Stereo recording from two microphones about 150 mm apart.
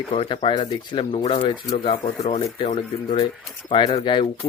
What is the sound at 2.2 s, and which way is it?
Speech, 45° left (ahead or behind).